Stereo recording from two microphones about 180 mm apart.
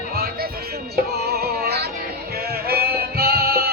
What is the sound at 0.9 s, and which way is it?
Music, 60° right (ahead or behind).